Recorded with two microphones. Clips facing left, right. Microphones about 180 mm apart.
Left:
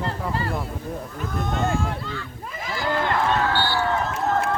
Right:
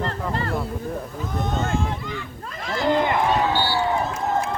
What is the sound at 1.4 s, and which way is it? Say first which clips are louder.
Speech: even; 20° right (ahead or behind).